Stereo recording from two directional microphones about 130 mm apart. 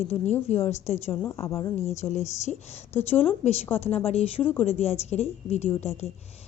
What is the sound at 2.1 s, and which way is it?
Speech, 60° left (ahead or behind).